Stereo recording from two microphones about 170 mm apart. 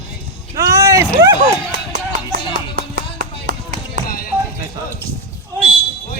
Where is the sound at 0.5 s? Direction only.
20° right (ahead or behind).